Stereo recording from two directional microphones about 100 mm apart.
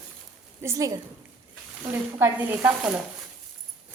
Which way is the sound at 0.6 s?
35° right (ahead or behind).